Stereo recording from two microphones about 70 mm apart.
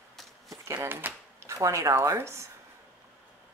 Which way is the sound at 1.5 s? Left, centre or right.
Right.